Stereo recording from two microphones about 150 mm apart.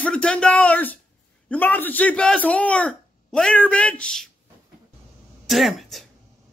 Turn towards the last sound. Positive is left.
turn(degrees=0)  # may be behind; listen again after turning